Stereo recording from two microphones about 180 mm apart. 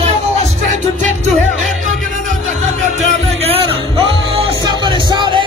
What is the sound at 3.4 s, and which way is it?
Music, 30° right (ahead or behind).